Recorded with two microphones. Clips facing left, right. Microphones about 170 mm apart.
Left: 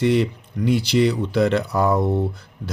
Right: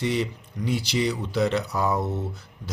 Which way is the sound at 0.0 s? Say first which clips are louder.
Left 7 dB; 60° left (ahead or behind).